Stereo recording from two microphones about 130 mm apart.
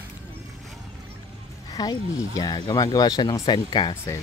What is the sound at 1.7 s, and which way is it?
Speech, 30° left (ahead or behind).